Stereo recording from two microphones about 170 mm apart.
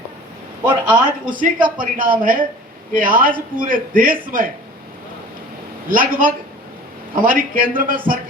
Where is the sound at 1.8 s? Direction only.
55° right (ahead or behind).